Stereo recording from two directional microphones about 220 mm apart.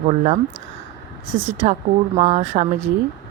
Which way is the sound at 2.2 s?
30° right (ahead or behind).